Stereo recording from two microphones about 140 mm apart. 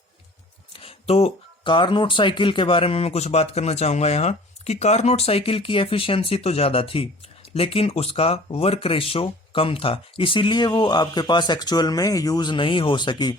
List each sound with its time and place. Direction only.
0.7 s speech: 40° left (ahead or behind)